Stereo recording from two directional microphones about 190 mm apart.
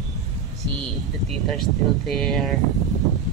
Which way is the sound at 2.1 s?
5° left (ahead or behind).